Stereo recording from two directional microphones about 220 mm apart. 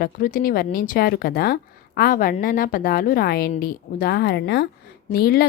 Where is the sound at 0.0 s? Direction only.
40° left (ahead or behind).